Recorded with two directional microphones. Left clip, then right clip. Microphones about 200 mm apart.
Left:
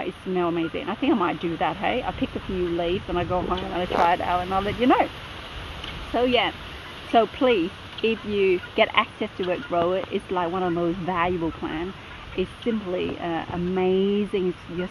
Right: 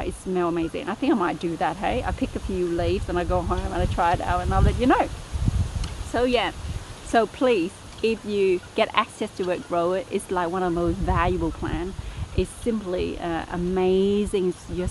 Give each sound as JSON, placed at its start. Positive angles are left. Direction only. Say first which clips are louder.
{"t": 0.0, "sound": "speech", "louder": "even", "side_deg": -15}
{"t": 6.1, "sound": "speech", "louder": "left 1 dB", "side_deg": -15}
{"t": 12.9, "sound": "speech", "louder": "even", "side_deg": -15}